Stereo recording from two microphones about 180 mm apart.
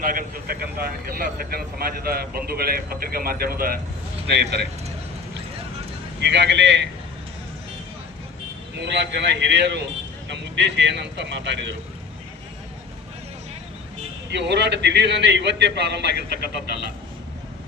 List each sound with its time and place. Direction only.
0.0 s speech: 55° right (ahead or behind)
6.1 s a man's voice: 70° right (ahead or behind)
8.8 s a man's voice: 75° right (ahead or behind)
14.3 s a man's voice: 70° right (ahead or behind)